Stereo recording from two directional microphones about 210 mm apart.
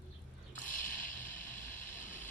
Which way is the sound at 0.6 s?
40° left (ahead or behind).